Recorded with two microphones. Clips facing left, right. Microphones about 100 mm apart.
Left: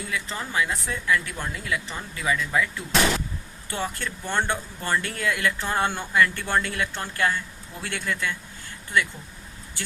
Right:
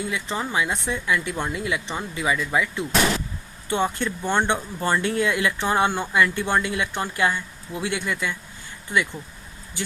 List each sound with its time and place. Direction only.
0.1 s a woman's voice: 20° right (ahead or behind)